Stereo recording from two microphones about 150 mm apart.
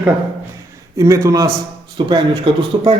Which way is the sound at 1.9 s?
35° right (ahead or behind).